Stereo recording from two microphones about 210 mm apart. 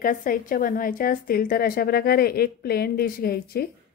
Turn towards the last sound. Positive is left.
turn(degrees=45)  # may be behind; listen again after turning